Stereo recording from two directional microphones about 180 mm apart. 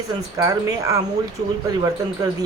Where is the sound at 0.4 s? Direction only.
20° right (ahead or behind).